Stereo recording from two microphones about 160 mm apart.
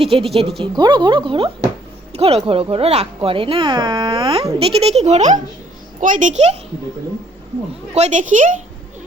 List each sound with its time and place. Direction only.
0.0 s a woman's voice: 35° right (ahead or behind)
7.9 s a woman's voice: 45° right (ahead or behind)